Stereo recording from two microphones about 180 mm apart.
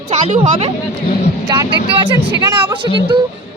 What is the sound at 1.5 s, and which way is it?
Speech, 25° right (ahead or behind).